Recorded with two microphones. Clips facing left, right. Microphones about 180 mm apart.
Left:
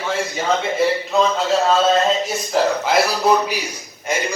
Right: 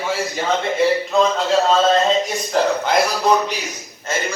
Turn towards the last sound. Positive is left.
turn(degrees=15)  # may be behind; listen again after turning